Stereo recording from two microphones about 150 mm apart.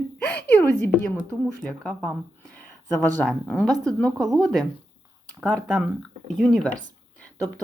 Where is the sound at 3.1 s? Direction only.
5° left (ahead or behind).